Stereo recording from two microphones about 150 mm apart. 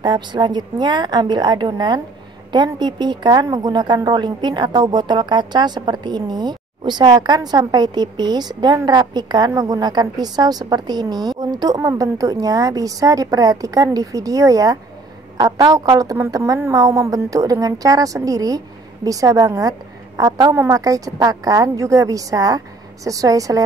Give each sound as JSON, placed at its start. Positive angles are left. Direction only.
{"t": 0.0, "sound": "a woman's voice", "side_deg": -30}